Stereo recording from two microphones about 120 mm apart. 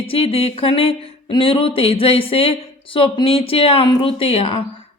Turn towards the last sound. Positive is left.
turn(degrees=55)  # may be behind; listen again after turning